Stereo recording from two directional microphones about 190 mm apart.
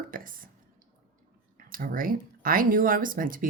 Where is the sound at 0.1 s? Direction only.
45° right (ahead or behind).